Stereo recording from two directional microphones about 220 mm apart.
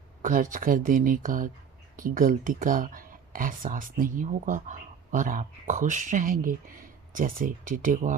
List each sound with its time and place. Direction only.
0.2 s speech: 40° right (ahead or behind)